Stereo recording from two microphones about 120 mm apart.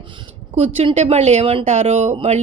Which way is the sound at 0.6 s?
60° right (ahead or behind).